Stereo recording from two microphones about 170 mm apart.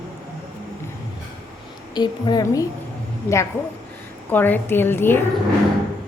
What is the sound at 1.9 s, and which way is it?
Speech, 25° left (ahead or behind).